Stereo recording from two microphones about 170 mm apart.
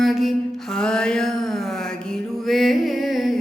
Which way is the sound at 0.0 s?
Centre (ahead or behind).